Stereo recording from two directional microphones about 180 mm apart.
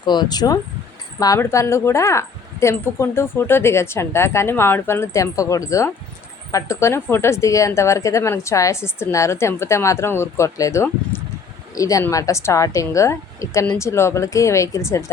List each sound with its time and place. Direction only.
0.0 s a woman's voice: 25° left (ahead or behind)